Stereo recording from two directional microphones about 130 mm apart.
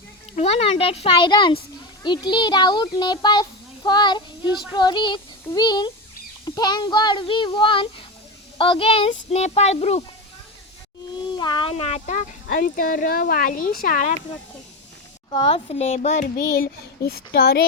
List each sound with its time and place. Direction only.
0.3 s a child's voice: 50° left (ahead or behind)
2.0 s child singing: 35° left (ahead or behind)
8.5 s a child's voice: 40° left (ahead or behind)
11.2 s a sound: 35° left (ahead or behind)
11.7 s speech: 55° left (ahead or behind); by 14.1 s 90° left
15.3 s a child's voice: 40° left (ahead or behind); by 16.6 s 75° left (ahead or behind)